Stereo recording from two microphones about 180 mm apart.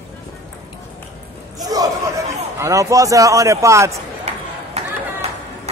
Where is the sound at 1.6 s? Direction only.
20° right (ahead or behind).